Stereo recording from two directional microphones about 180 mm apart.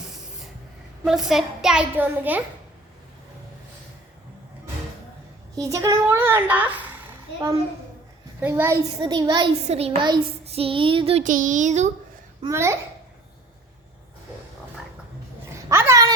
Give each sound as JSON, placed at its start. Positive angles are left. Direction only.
{"t": 1.0, "sound": "a child's voice", "side_deg": 0}
{"t": 5.5, "sound": "a woman's voice", "side_deg": -20}
{"t": 9.6, "sound": "child singing", "side_deg": -35}
{"t": 12.5, "sound": "a child's voice", "side_deg": -15}
{"t": 15.5, "sound": "a sound", "side_deg": -15}